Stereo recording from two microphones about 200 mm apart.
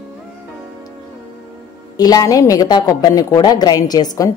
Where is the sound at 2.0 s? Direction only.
20° left (ahead or behind).